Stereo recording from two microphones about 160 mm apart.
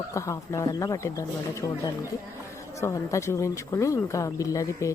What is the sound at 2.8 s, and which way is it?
Speech, 20° left (ahead or behind).